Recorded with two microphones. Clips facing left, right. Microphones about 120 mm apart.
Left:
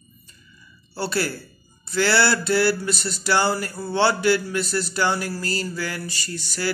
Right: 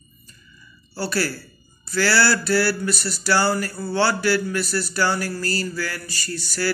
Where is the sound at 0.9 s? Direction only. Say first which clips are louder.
Even; 25° left (ahead or behind).